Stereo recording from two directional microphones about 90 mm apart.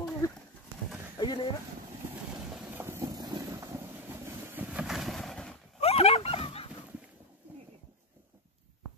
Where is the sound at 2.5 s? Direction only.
20° right (ahead or behind).